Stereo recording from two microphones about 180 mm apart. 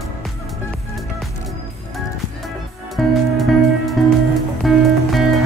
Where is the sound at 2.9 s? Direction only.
Centre (ahead or behind).